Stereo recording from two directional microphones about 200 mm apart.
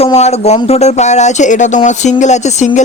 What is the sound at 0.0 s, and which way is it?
Speech, 35° left (ahead or behind).